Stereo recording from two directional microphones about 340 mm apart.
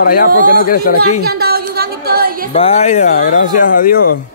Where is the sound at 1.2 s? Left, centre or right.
Right.